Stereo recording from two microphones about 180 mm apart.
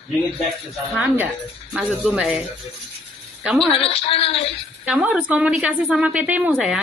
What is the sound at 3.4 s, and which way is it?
Speech, centre (ahead or behind).